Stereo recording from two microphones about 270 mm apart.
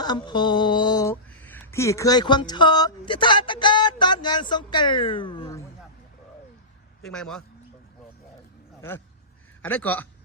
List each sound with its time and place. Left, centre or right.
0.0 s speech: centre
7.0 s a man's voice: centre
9.6 s a man's voice: centre